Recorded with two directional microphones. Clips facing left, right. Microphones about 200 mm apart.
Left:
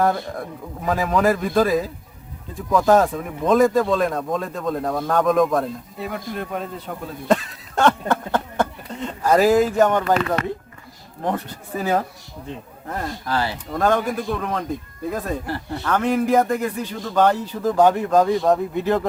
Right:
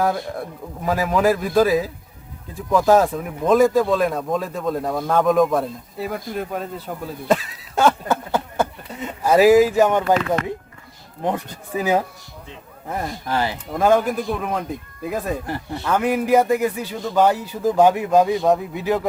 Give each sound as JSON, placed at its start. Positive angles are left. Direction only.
{"t": 0.0, "sound": "speech", "side_deg": 0}
{"t": 13.7, "sound": "speech", "side_deg": -5}